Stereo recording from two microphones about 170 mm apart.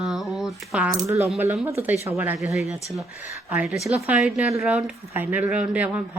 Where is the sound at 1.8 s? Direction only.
15° right (ahead or behind).